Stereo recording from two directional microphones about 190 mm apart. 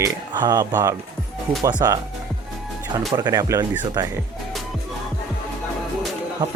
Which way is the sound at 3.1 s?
20° right (ahead or behind).